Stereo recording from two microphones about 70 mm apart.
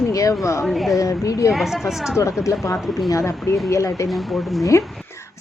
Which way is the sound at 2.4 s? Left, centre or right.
Left.